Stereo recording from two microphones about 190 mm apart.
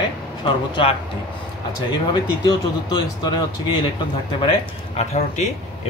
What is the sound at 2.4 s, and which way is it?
Speech, 20° left (ahead or behind).